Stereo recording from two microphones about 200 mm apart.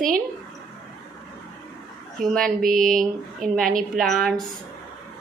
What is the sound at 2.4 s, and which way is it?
Mantra, 45° right (ahead or behind).